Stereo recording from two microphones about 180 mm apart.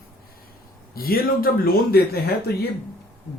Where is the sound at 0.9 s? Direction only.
55° left (ahead or behind).